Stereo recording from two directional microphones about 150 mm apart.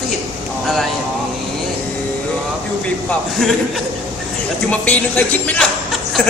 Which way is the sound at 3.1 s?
Centre (ahead or behind).